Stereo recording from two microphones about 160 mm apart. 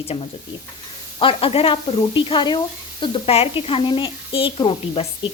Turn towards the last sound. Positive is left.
turn(degrees=35)  # may be behind; listen again after turning